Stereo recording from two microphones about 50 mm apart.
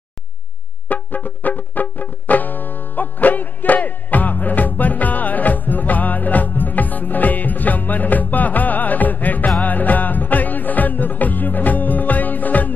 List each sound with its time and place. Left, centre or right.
0.8 s music: left